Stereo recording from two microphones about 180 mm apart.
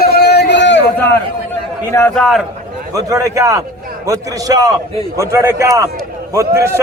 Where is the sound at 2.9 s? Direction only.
20° right (ahead or behind).